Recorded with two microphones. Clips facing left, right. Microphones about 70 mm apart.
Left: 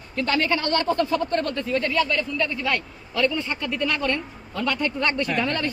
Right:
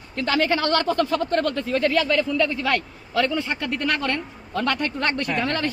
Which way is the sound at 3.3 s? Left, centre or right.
Right.